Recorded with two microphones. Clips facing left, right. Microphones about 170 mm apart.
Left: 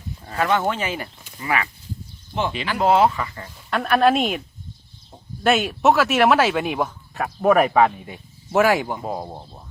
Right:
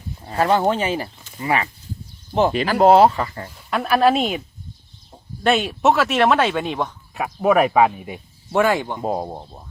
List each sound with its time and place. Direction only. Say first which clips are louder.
0.3 s speech: right 3 dB; 35° right (ahead or behind)
2.3 s speech: right 7 dB; 40° right (ahead or behind)
3.7 s speech: right 1 dB; 5° right (ahead or behind)
7.1 s speech: even; 5° right (ahead or behind)
8.5 s speech: even; 10° left (ahead or behind)
9.0 s speech: right 5 dB; 25° right (ahead or behind)